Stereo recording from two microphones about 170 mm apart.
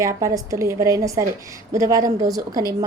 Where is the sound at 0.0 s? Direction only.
20° right (ahead or behind).